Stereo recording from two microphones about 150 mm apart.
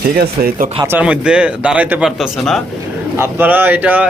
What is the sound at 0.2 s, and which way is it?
Speech, 80° right.